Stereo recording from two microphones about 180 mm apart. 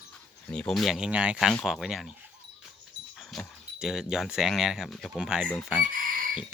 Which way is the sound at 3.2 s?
Centre (ahead or behind).